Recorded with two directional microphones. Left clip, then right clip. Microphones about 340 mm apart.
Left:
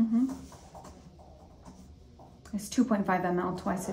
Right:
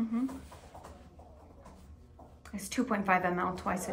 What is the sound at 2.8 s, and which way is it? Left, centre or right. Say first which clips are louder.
Speech: right 3 dB; right.